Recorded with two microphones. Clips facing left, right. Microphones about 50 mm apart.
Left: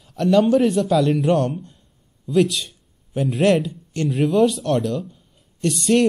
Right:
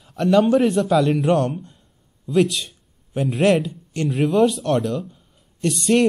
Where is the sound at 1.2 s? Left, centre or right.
Right.